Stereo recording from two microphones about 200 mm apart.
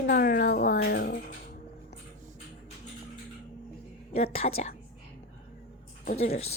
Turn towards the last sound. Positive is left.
turn(degrees=30)  # may be behind; listen again after turning